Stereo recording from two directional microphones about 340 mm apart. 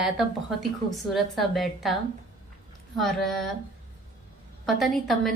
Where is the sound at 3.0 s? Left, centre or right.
Centre.